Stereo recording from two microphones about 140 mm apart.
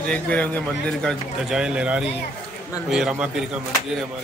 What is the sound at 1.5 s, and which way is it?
A man's voice, 5° right (ahead or behind).